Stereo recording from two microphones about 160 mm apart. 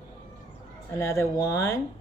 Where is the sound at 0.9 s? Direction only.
20° left (ahead or behind).